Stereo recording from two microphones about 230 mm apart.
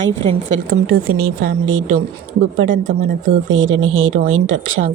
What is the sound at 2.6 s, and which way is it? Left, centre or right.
Speech, right.